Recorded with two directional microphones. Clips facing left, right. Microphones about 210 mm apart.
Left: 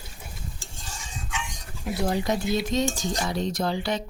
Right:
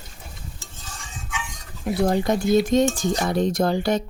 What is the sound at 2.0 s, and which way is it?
Cutlery, 55° right (ahead or behind).